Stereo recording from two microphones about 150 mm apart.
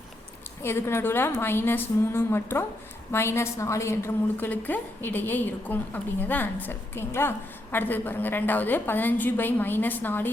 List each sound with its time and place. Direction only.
0.6 s a woman's voice: 15° left (ahead or behind)